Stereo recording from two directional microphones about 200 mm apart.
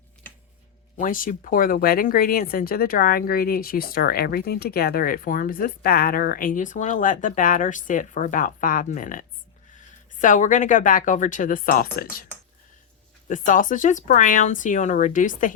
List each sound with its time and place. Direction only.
0.9 s speech: 40° left (ahead or behind)
13.2 s speech: 40° left (ahead or behind)